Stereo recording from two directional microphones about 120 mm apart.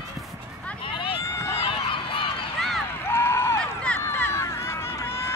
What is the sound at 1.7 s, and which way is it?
Run, 50° left (ahead or behind).